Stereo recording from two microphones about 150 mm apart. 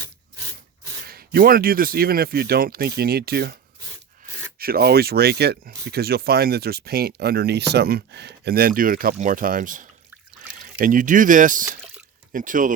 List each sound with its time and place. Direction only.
1.0 s speech: 85° right; by 12.7 s 60° right (ahead or behind)